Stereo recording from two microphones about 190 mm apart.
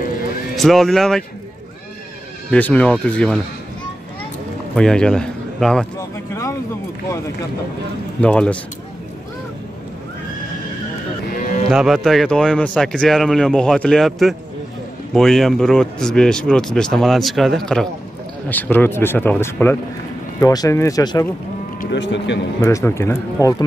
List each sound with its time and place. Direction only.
0.6 s a man's voice: centre (ahead or behind)
2.5 s a man's voice: 5° left (ahead or behind)
4.7 s a man's voice: 5° left (ahead or behind)
5.9 s speech: 15° left (ahead or behind)
8.2 s speech: 5° left (ahead or behind)
11.7 s a man's voice: centre (ahead or behind); by 21.3 s 20° left (ahead or behind)
21.9 s speech: 70° left (ahead or behind)
22.6 s speech: 15° left (ahead or behind)